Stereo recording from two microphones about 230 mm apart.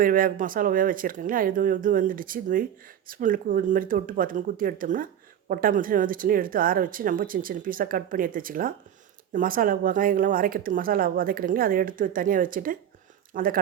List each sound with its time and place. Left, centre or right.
0.0 s speech: right